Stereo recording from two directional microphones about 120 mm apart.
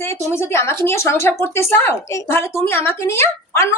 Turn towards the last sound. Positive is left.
turn(degrees=20)  # may be behind; listen again after turning